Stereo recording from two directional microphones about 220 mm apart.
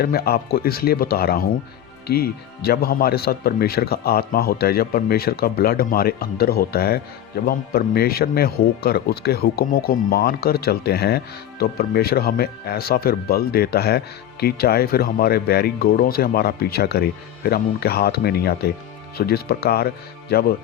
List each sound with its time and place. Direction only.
0.0 s speech: 45° left (ahead or behind)